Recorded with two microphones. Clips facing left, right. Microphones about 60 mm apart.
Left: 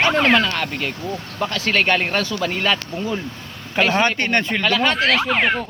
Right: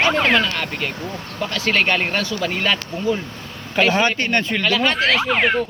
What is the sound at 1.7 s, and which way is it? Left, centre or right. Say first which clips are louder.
Speech: even; centre.